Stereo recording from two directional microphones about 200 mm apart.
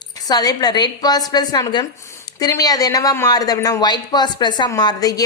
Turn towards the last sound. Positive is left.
turn(degrees=20)  # may be behind; listen again after turning